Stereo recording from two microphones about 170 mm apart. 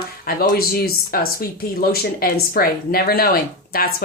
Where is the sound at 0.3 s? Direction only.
65° left (ahead or behind).